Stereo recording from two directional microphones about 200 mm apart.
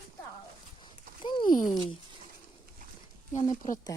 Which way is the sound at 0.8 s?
25° left (ahead or behind).